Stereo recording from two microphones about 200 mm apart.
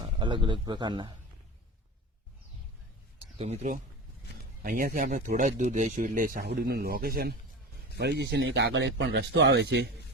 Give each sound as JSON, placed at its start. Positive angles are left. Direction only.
{"t": 0.2, "sound": "a man's voice", "side_deg": -25}
{"t": 3.3, "sound": "speech", "side_deg": -30}